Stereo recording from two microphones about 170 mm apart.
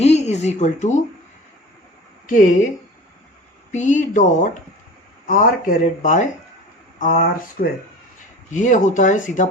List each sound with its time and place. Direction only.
0.0 s speech: 40° left (ahead or behind)
2.2 s a woman's voice: 50° left (ahead or behind)
3.7 s speech: 45° left (ahead or behind)
8.4 s speech: 45° left (ahead or behind)